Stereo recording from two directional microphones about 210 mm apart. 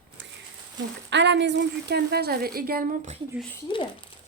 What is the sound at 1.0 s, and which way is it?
A woman's voice, 55° right (ahead or behind).